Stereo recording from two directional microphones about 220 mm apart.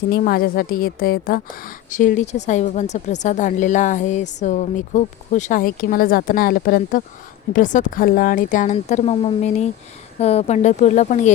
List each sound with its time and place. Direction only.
0.1 s speech: 45° left (ahead or behind)